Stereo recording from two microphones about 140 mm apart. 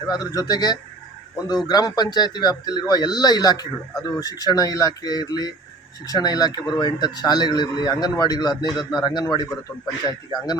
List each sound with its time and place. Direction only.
0.1 s a man's voice: 25° left (ahead or behind)